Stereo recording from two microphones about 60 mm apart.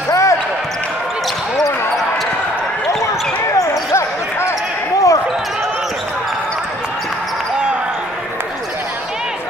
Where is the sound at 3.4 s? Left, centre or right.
Left.